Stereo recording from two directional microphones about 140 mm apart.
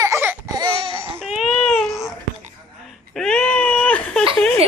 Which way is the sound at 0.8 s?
20° right (ahead or behind).